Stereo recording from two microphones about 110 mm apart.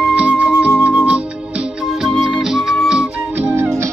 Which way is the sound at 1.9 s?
Centre (ahead or behind).